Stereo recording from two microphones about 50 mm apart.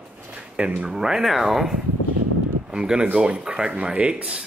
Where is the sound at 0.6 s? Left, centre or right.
Right.